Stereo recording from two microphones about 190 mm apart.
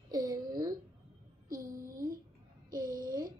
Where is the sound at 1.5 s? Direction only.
45° right (ahead or behind).